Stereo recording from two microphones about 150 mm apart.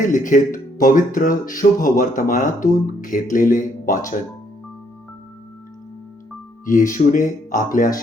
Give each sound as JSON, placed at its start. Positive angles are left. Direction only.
{"t": 0.0, "sound": "speech", "side_deg": 60}
{"t": 6.7, "sound": "speech", "side_deg": 60}